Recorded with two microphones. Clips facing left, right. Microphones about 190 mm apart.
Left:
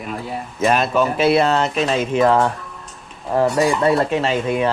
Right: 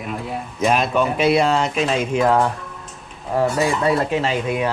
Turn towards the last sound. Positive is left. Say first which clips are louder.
# left 2 dB
turn(degrees=-5)  # may be behind; listen again after turning